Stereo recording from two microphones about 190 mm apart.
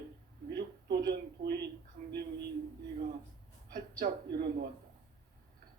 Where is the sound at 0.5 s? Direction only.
60° right (ahead or behind).